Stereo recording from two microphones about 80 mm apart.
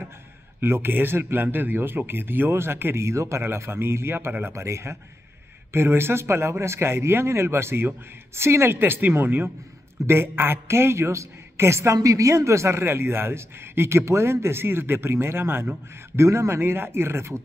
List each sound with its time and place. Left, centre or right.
0.6 s a woman's voice: right